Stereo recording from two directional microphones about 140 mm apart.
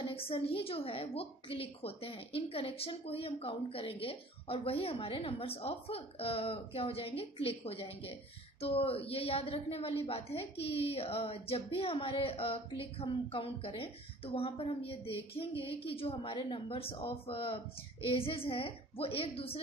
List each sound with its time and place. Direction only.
0.0 s a woman's voice: 40° left (ahead or behind)